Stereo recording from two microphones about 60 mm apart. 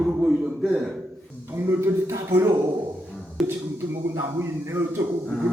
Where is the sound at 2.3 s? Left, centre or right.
Right.